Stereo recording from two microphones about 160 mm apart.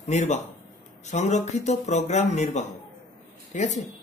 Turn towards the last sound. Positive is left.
turn(degrees=50)  # may be behind; listen again after turning